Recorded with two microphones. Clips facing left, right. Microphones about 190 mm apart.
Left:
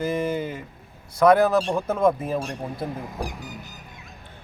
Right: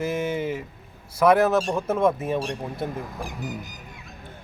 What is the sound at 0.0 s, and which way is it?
Speech, 5° right (ahead or behind).